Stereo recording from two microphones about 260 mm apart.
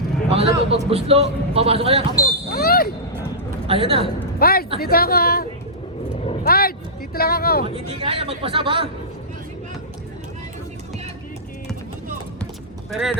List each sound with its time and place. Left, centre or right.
0.3 s a man's voice: right
2.5 s a sound: left
3.7 s speech: right
4.4 s a woman's voice: left
7.7 s speech: right
12.9 s speech: centre